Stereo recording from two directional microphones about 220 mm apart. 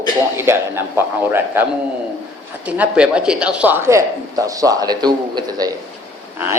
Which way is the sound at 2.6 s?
5° right (ahead or behind).